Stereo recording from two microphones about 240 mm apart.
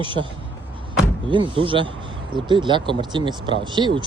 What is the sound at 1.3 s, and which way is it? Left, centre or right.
Speech, right.